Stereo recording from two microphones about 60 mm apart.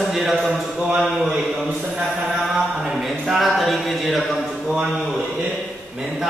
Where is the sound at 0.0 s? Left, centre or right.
Centre.